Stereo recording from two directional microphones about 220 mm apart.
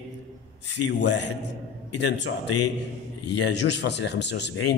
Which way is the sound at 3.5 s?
50° left (ahead or behind).